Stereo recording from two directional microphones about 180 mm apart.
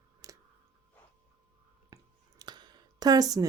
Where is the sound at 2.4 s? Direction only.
25° right (ahead or behind).